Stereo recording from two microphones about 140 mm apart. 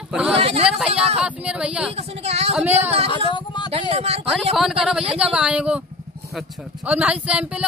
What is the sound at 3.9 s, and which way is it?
Speech, 50° right (ahead or behind).